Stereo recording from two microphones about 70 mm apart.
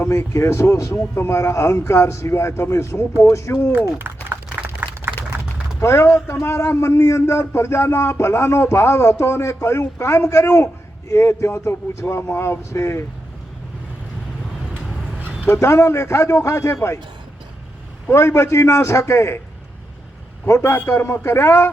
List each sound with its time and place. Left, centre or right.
0.0 s a man's voice: left
3.9 s a sound: right
5.8 s a man's voice: left
15.4 s a man's voice: left
18.1 s a man's voice: left
20.5 s a man's voice: left